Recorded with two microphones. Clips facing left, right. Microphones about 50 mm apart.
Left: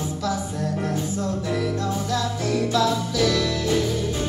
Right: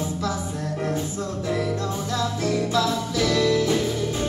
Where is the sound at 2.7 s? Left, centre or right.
Right.